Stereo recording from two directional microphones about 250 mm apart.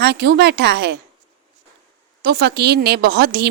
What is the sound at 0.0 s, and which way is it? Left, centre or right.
Speech, right.